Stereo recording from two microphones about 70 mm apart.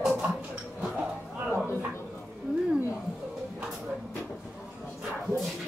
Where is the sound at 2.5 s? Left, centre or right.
Centre.